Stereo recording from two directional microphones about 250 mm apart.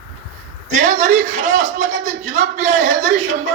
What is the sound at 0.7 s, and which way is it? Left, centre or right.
A man's voice, right.